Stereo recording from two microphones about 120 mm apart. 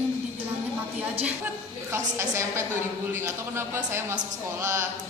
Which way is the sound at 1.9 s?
25° right (ahead or behind).